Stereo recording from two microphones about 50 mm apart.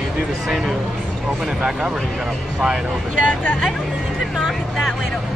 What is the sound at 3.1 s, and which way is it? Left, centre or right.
Speech, left.